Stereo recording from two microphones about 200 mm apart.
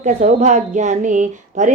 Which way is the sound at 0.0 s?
40° right (ahead or behind).